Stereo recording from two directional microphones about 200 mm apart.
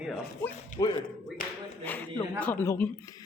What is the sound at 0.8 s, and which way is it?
Speech, 20° left (ahead or behind).